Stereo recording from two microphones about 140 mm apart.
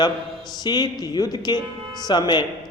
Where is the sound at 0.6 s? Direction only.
30° left (ahead or behind).